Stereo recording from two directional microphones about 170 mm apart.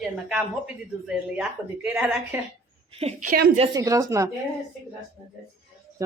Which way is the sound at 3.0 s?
50° right (ahead or behind).